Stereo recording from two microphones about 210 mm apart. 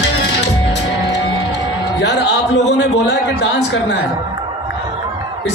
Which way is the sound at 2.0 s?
55° left (ahead or behind).